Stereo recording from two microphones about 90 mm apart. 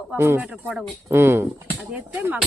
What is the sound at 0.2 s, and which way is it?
Speech, 25° right (ahead or behind).